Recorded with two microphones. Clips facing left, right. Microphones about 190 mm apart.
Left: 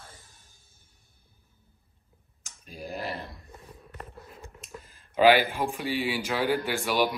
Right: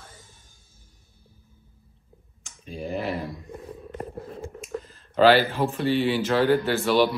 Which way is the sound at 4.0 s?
35° right (ahead or behind).